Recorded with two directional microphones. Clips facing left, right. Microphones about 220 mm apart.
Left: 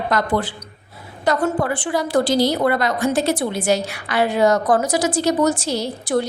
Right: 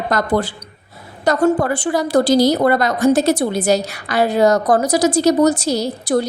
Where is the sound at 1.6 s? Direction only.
40° right (ahead or behind).